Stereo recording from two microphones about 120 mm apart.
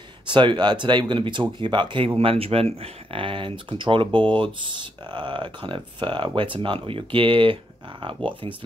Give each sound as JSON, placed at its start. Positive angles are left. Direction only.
{"t": 0.3, "sound": "speech", "side_deg": -40}